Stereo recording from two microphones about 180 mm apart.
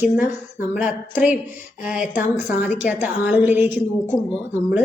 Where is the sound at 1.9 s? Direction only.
45° left (ahead or behind).